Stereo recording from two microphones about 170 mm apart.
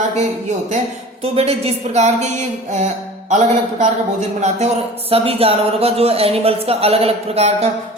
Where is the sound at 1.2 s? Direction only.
35° right (ahead or behind).